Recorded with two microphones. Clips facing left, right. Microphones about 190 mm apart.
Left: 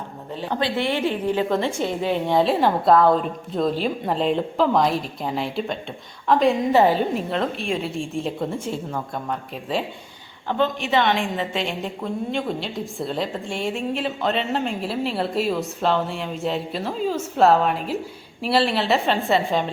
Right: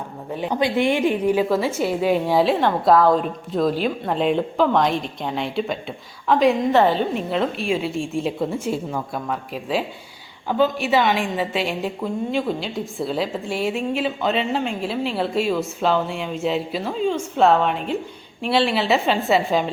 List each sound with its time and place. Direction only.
0.4 s a woman's voice: 15° right (ahead or behind); by 7.3 s 10° left (ahead or behind)
7.3 s a woman's voice: centre (ahead or behind)